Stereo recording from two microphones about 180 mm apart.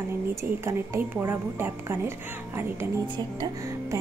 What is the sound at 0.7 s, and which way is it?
A woman's voice, 15° right (ahead or behind).